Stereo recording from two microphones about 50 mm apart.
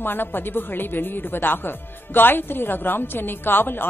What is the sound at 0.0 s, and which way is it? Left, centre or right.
Speech, left.